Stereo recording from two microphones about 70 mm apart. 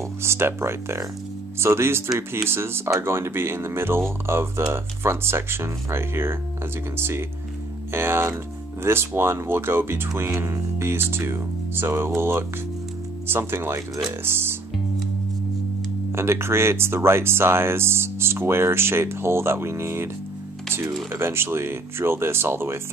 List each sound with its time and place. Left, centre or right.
0.2 s speech: right
16.2 s speech: right
21.1 s speech: right